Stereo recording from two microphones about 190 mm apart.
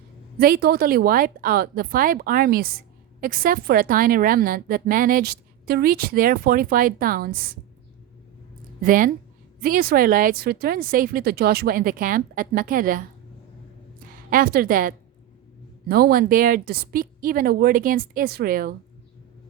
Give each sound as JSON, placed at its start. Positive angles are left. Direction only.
{"t": 0.3, "sound": "a woman's voice", "side_deg": -55}
{"t": 8.8, "sound": "a woman's voice", "side_deg": -45}
{"t": 14.3, "sound": "a woman's voice", "side_deg": -50}